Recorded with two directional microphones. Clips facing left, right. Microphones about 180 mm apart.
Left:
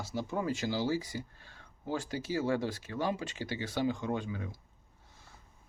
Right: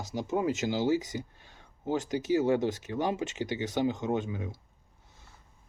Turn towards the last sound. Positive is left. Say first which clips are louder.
# right 4 dB
turn(degrees=-20)  # may be behind; listen again after turning